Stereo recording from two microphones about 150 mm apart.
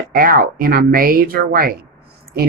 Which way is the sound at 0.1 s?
75° right (ahead or behind).